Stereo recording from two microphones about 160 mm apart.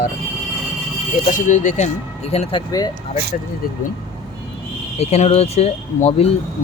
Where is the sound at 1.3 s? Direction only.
50° left (ahead or behind).